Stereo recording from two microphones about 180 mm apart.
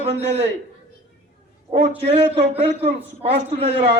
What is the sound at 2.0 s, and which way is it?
A man's voice, 35° right (ahead or behind).